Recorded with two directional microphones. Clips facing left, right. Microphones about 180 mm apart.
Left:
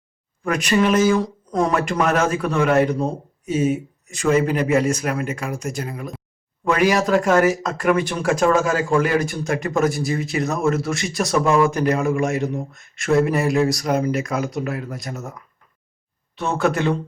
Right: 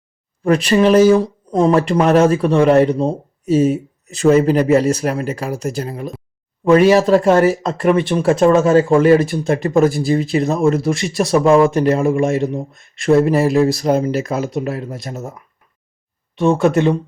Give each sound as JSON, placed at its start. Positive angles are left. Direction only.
{"t": 0.4, "sound": "speech", "side_deg": -30}